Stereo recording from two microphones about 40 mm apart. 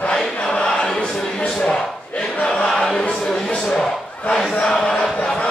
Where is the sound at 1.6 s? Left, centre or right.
Left.